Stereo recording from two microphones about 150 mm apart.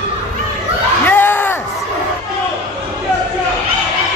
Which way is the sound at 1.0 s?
15° left (ahead or behind).